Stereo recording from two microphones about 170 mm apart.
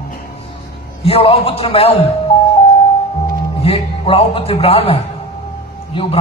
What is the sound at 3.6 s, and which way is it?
A man's voice, 35° left (ahead or behind).